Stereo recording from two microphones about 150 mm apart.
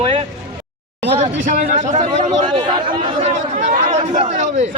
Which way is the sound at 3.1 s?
55° right (ahead or behind).